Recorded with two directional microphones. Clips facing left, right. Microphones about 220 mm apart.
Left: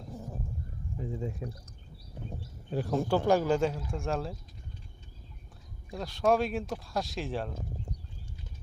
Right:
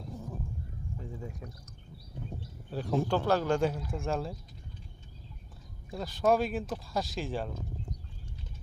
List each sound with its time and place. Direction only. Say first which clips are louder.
0.9 s speech: left 7 dB; 20° left (ahead or behind)
2.6 s speech: left 1 dB; 15° left (ahead or behind)
5.9 s speech: even; centre (ahead or behind)